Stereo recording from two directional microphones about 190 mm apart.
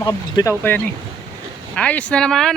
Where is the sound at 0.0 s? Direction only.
20° left (ahead or behind).